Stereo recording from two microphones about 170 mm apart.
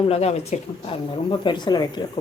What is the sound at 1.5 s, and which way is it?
Speech, 25° left (ahead or behind).